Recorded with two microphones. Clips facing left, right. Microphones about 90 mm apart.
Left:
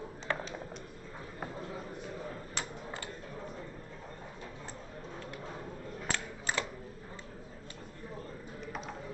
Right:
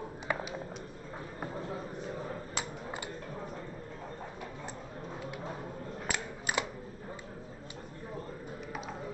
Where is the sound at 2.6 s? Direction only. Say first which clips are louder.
Right 2 dB; 15° right (ahead or behind).